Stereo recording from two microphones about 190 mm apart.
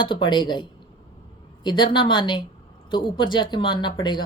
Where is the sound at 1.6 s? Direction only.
25° left (ahead or behind).